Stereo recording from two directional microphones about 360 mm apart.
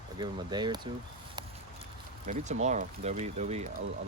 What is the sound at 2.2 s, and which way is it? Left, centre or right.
Speech, centre.